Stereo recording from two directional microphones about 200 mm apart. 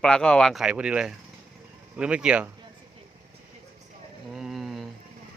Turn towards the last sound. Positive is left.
turn(degrees=0)  # may be behind; listen again after turning